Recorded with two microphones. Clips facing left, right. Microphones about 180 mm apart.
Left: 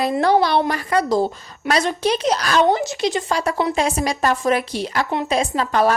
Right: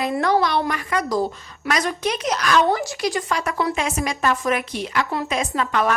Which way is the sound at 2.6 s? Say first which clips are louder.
Left 3 dB; 20° left (ahead or behind).